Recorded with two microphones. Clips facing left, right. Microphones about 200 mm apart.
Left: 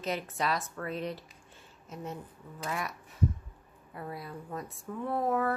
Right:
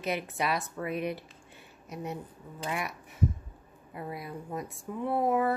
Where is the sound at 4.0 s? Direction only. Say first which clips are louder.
Right 2 dB; 15° right (ahead or behind).